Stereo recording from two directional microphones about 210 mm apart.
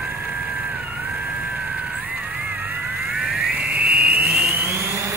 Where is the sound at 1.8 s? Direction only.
5° right (ahead or behind).